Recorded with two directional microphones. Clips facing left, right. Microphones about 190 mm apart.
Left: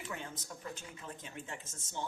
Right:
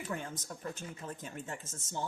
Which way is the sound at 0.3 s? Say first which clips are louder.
Right 3 dB; 45° right (ahead or behind).